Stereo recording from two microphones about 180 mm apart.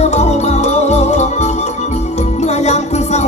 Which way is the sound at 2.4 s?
35° left (ahead or behind).